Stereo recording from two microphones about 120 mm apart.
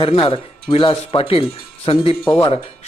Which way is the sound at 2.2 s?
20° left (ahead or behind).